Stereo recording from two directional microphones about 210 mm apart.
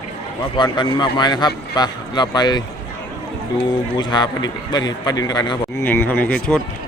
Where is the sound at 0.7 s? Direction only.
20° left (ahead or behind).